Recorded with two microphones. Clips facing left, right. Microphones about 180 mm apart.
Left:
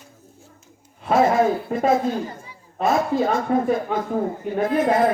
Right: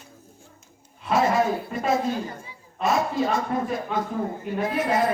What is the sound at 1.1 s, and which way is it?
Speech, 50° left (ahead or behind).